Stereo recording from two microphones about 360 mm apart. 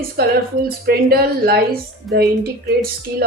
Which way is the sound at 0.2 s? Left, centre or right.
Right.